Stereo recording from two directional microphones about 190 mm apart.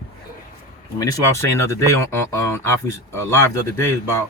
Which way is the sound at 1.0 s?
15° left (ahead or behind).